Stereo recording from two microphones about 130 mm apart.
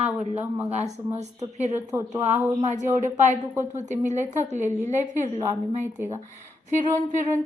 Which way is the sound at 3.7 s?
65° right (ahead or behind).